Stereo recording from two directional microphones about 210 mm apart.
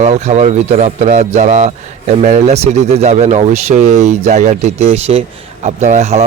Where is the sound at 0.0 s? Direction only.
30° right (ahead or behind).